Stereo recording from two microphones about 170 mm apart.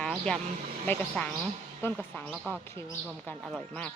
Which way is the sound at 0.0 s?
5° left (ahead or behind).